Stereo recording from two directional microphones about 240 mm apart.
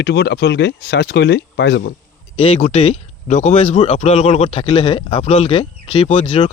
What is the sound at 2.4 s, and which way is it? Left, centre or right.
Speech, left.